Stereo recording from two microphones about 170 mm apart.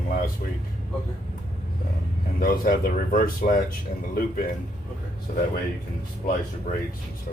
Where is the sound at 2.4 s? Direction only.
55° left (ahead or behind).